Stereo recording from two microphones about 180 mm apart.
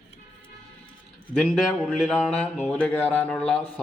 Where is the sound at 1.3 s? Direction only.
5° left (ahead or behind).